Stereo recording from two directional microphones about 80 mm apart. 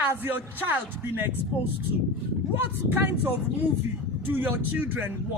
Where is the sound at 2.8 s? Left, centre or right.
Right.